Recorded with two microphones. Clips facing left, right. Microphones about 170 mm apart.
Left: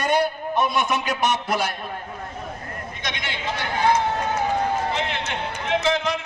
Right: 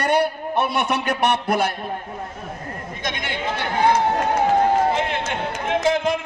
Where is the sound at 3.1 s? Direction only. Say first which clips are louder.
Right 4 dB; 50° right (ahead or behind).